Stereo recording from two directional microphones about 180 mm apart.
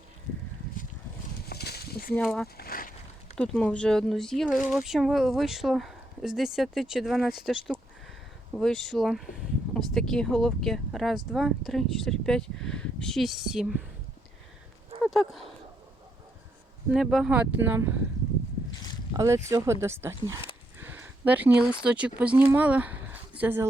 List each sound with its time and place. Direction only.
1.5 s a sound: 60° left (ahead or behind)
2.1 s speech: 5° left (ahead or behind)
2.6 s speech: 55° left (ahead or behind)
3.3 s speech: 5° left (ahead or behind)
15.0 s speech: centre (ahead or behind)
16.9 s speech: centre (ahead or behind)
19.1 s speech: 15° right (ahead or behind)
20.7 s a sound: 10° right (ahead or behind)
21.7 s speech: 5° right (ahead or behind)